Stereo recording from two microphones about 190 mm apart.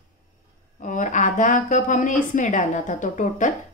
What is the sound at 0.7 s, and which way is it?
A woman's voice, 40° left (ahead or behind).